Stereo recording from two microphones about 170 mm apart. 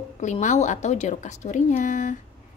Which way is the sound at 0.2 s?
45° left (ahead or behind).